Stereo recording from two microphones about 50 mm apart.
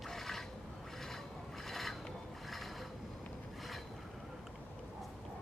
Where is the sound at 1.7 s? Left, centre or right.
Centre.